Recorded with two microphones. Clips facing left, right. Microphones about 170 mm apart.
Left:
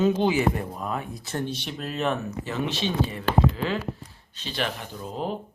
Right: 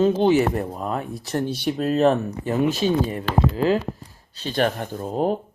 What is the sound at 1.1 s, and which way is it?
Speech, 10° right (ahead or behind).